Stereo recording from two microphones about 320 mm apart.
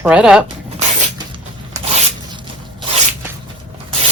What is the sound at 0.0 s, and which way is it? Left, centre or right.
Speech, centre.